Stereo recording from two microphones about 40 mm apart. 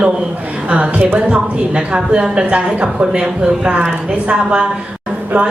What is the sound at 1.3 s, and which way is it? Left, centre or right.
A woman's voice, right.